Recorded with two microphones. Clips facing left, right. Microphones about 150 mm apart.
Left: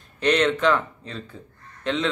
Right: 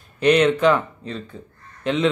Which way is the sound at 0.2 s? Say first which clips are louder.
Right 4 dB; 10° right (ahead or behind).